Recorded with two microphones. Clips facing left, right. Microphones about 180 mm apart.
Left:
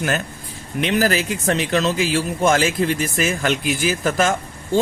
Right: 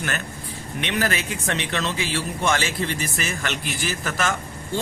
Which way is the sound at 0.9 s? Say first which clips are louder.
Left 6 dB; 40° left (ahead or behind).